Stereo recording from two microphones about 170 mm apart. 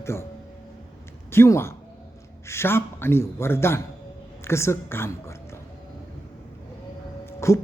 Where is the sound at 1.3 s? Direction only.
15° left (ahead or behind).